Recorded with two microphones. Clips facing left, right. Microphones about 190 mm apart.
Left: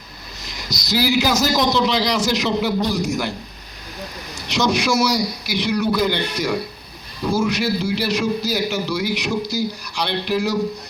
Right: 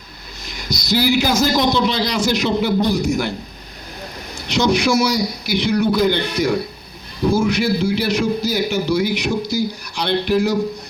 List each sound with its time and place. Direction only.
0.4 s a man's voice: 55° right (ahead or behind)
4.4 s a man's voice: 55° right (ahead or behind)